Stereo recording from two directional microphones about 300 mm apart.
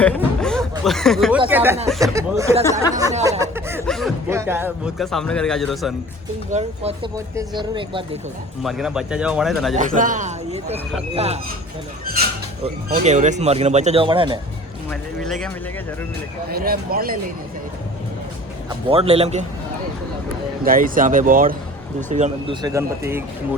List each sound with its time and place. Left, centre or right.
0.2 s a sound: centre
1.5 s speech: centre
3.2 s chuckle: centre
6.5 s speech: right
8.6 s speech: centre
9.7 s speech: right
12.6 s speech: right
14.8 s speech: centre
16.5 s speech: right
18.9 s speech: centre
20.7 s speech: right; by 23.2 s centre